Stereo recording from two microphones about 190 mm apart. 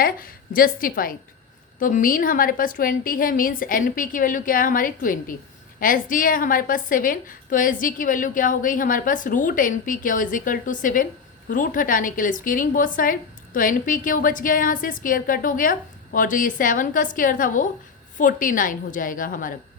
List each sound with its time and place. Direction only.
0.0 s a woman's voice: 50° left (ahead or behind)